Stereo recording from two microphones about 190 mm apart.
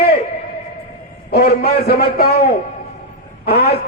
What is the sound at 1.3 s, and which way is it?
A man's voice, 55° left (ahead or behind).